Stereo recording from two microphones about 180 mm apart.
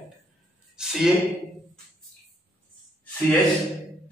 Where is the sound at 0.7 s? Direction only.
5° right (ahead or behind).